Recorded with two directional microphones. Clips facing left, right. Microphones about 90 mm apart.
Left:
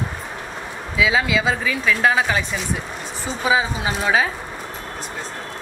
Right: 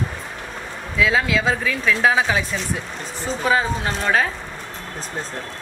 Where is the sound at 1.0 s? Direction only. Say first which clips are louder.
Even; centre (ahead or behind).